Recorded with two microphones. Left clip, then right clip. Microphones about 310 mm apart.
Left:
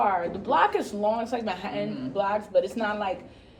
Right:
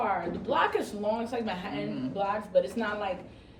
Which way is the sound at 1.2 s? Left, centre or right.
Left.